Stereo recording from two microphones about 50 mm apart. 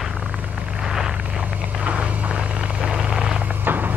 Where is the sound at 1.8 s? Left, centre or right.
Right.